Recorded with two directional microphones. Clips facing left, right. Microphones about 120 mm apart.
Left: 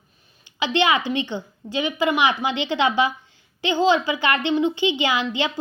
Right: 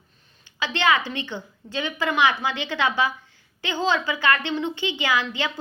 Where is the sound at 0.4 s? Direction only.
15° left (ahead or behind).